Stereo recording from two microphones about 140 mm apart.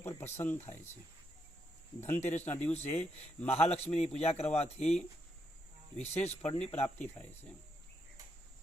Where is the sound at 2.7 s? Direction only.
50° left (ahead or behind).